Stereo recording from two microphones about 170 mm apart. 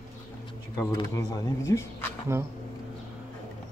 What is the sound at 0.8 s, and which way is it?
Speech, 20° left (ahead or behind).